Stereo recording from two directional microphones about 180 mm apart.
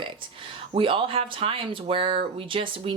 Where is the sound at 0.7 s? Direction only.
30° right (ahead or behind).